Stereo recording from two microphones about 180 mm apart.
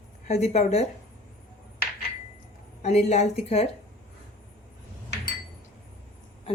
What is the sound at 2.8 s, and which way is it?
Speech, 40° left (ahead or behind).